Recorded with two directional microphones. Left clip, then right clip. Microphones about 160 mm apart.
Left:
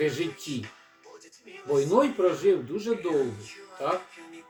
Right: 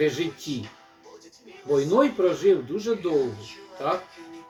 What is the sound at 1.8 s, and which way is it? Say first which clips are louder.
Speech: right 2 dB; centre (ahead or behind).